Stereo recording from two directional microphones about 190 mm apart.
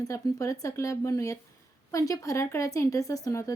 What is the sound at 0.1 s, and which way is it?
A woman's voice, 15° left (ahead or behind).